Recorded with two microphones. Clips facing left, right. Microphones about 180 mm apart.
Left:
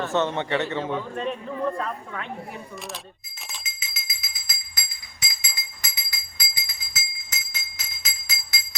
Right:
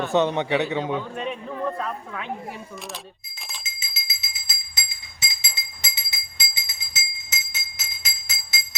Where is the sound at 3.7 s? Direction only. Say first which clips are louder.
Even; 30° right (ahead or behind).